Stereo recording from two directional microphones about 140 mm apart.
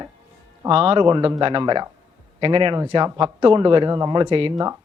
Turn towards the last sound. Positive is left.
turn(degrees=-30)  # may be behind; listen again after turning